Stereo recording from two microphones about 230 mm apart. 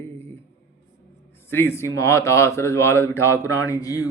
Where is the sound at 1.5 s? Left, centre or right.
Centre.